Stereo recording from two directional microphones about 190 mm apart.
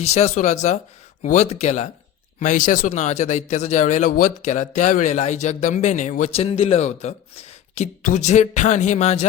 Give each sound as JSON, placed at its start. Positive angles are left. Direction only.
{"t": 0.0, "sound": "speech", "side_deg": 35}